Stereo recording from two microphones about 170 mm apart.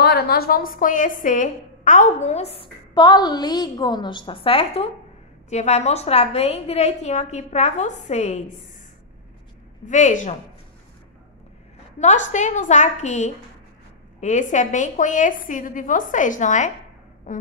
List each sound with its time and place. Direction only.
0.0 s a woman's voice: 70° left (ahead or behind); by 8.5 s 40° left (ahead or behind)
9.8 s a woman's voice: 45° left (ahead or behind)
12.0 s a woman's voice: 45° left (ahead or behind)
17.3 s a sound: 50° left (ahead or behind)